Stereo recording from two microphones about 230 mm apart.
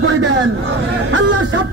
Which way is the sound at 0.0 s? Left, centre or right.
Right.